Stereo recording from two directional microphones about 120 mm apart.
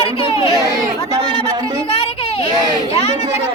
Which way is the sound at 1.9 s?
50° left (ahead or behind).